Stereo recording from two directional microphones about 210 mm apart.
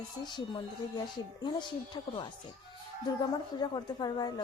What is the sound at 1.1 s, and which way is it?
Speech, 20° left (ahead or behind).